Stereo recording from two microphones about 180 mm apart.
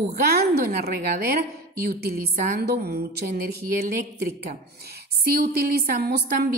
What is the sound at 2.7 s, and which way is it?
Speech, 60° right (ahead or behind).